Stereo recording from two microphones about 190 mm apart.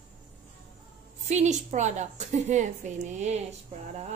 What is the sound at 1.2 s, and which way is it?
A woman's voice, 35° right (ahead or behind).